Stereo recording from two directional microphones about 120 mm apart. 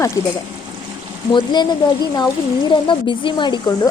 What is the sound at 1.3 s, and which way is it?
Speech, 35° left (ahead or behind).